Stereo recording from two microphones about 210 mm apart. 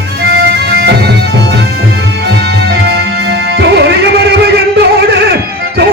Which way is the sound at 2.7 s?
50° right (ahead or behind).